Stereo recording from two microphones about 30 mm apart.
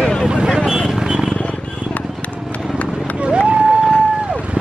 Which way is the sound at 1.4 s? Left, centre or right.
Left.